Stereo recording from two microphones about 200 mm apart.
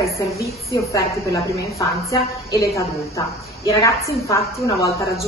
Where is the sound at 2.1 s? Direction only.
15° left (ahead or behind).